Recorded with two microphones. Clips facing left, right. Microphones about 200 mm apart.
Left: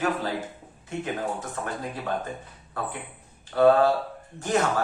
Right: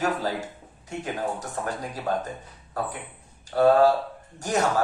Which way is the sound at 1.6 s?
35° right (ahead or behind).